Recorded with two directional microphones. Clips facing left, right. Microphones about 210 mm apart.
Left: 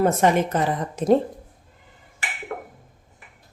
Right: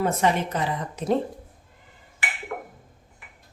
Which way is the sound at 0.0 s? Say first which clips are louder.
Left 4 dB; 50° left (ahead or behind).